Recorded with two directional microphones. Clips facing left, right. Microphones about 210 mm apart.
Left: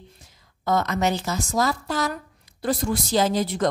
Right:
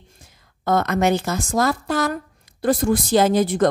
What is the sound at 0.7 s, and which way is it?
A woman's voice, 55° right (ahead or behind).